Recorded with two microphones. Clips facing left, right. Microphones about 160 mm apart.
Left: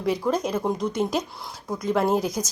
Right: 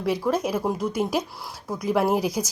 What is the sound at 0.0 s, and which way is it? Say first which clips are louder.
A woman's voice: even; 5° right (ahead or behind).